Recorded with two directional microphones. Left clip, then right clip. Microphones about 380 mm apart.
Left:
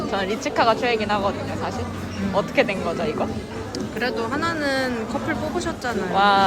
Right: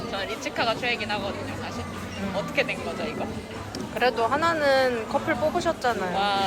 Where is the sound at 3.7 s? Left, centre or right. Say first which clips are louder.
Right 2 dB; centre.